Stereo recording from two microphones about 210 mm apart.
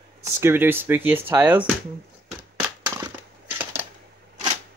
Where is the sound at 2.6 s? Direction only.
10° right (ahead or behind).